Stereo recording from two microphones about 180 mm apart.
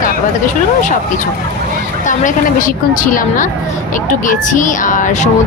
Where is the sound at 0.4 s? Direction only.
45° left (ahead or behind).